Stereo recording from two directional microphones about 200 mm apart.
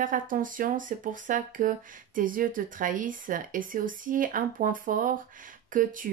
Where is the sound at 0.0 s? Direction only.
40° right (ahead or behind).